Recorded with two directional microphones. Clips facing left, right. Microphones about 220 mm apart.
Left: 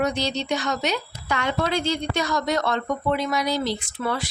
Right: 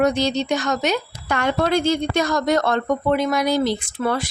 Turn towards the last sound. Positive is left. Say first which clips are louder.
# right 4 dB
turn(degrees=-50)  # may be behind; listen again after turning